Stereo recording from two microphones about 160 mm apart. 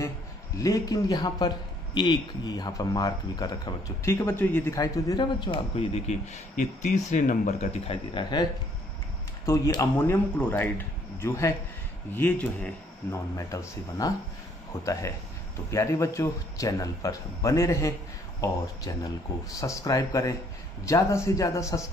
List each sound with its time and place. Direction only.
0.6 s a man's voice: 20° left (ahead or behind); by 7.7 s 50° left (ahead or behind)
7.8 s speech: 30° left (ahead or behind)
9.5 s a man's voice: 20° left (ahead or behind)